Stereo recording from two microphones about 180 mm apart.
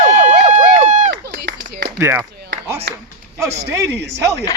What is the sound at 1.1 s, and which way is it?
Clapping, 65° right (ahead or behind).